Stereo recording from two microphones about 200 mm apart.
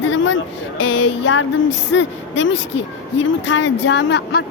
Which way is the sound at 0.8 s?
80° left.